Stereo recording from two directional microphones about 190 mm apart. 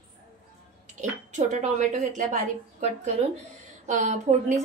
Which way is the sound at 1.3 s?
40° right (ahead or behind).